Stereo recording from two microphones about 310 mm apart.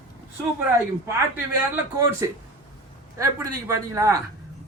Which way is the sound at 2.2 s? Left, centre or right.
Centre.